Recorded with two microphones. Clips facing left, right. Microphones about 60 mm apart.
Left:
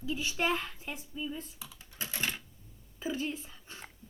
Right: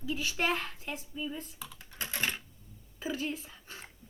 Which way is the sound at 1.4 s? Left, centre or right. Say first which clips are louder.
Right 1 dB; right.